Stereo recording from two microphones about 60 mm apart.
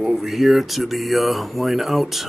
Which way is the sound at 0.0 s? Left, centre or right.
Centre.